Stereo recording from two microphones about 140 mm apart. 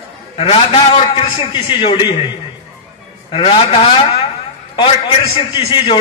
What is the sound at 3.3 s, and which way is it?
Speech, 40° left (ahead or behind).